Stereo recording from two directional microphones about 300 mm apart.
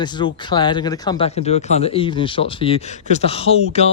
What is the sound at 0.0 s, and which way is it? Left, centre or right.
A man's voice, centre.